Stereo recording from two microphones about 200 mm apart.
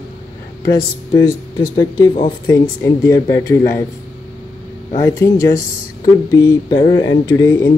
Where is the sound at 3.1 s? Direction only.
15° left (ahead or behind).